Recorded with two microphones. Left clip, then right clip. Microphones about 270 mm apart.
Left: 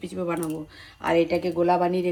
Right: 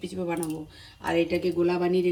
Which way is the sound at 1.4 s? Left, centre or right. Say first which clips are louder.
Left 4 dB; centre.